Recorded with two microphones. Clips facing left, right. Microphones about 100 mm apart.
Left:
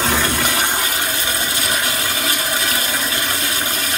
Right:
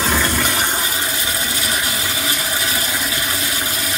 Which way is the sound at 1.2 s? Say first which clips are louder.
Left 1 dB; 25° left (ahead or behind).